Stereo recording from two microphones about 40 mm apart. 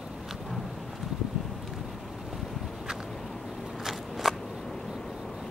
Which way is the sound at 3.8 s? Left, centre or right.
Centre.